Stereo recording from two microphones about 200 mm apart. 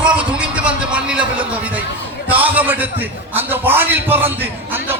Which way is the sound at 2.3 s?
10° right (ahead or behind).